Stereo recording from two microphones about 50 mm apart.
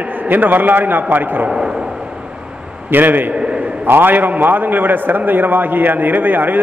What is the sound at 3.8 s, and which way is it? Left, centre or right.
A man's voice, right.